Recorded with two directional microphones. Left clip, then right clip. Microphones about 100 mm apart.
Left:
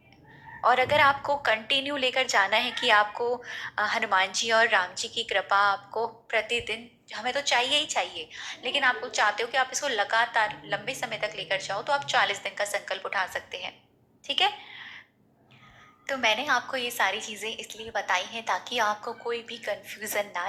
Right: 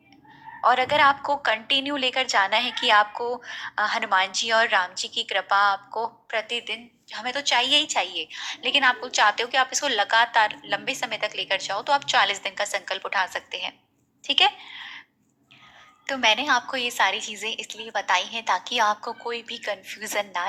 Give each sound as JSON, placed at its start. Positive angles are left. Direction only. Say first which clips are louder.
{"t": 0.6, "sound": "a woman's voice", "louder": "right 2 dB", "side_deg": -20}
{"t": 14.3, "sound": "a sound", "louder": "right 5 dB", "side_deg": -50}
{"t": 16.0, "sound": "a woman's voice", "louder": "right 4 dB", "side_deg": -50}